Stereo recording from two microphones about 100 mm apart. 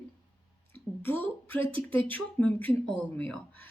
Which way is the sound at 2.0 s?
15° left (ahead or behind).